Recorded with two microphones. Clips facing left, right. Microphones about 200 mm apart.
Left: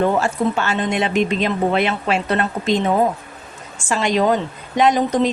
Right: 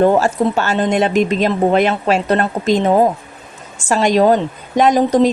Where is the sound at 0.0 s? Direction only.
40° right (ahead or behind).